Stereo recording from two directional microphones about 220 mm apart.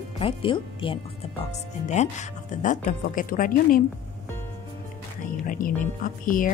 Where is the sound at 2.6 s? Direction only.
35° left (ahead or behind).